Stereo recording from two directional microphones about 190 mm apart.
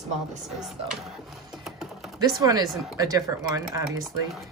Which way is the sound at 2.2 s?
20° right (ahead or behind).